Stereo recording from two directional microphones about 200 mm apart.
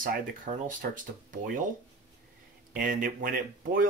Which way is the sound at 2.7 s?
45° right (ahead or behind).